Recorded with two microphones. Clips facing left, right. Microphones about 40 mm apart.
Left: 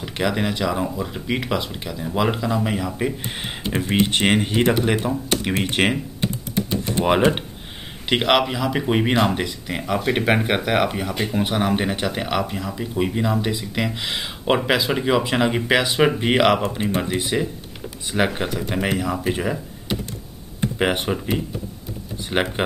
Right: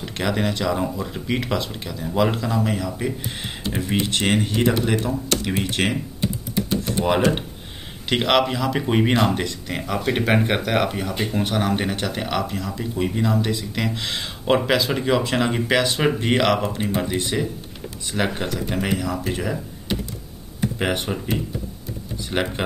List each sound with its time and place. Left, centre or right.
0.0 s speech: centre
7.1 s speech: left
8.1 s speech: centre
20.8 s speech: centre